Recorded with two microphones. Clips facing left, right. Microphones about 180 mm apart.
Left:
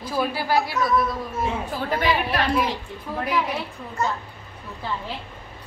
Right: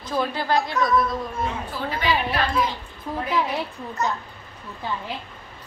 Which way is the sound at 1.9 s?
50° left (ahead or behind).